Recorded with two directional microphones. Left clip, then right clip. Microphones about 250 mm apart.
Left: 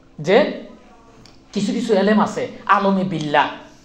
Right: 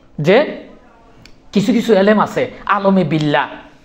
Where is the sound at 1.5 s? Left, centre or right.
Right.